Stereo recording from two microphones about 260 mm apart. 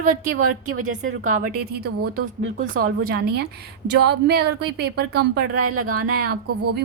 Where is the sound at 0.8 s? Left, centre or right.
Right.